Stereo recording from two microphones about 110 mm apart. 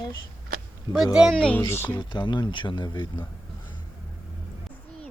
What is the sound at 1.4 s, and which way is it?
Speech, 10° left (ahead or behind).